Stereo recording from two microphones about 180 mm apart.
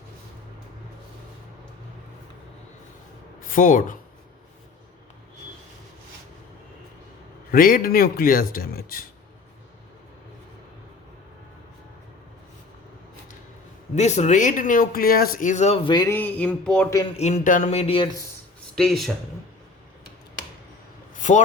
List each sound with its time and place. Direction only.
3.5 s speech: 50° left (ahead or behind)
7.5 s speech: 50° left (ahead or behind)
13.9 s speech: 40° left (ahead or behind); by 16.1 s 25° left (ahead or behind)
16.1 s music: 10° left (ahead or behind)
17.2 s speech: 40° left (ahead or behind)
18.8 s speech: centre (ahead or behind)
21.2 s a sound: 40° left (ahead or behind)